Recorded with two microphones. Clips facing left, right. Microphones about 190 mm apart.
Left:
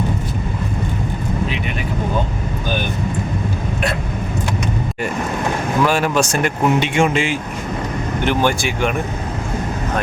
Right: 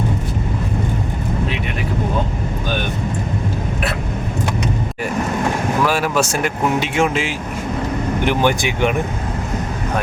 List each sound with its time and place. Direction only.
5.8 s speech: 5° right (ahead or behind)
8.2 s speech: 15° right (ahead or behind)